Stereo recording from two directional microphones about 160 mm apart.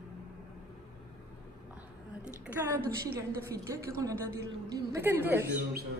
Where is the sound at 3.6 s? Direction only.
20° right (ahead or behind).